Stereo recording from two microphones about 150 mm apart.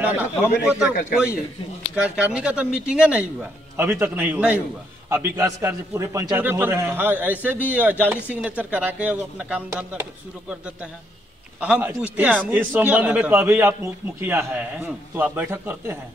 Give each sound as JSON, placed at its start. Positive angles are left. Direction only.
{"t": 0.0, "sound": "a man's voice", "side_deg": -10}
{"t": 2.0, "sound": "speech", "side_deg": -10}